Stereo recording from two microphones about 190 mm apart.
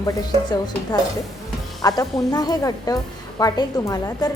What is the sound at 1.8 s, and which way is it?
A woman's voice, 20° left (ahead or behind).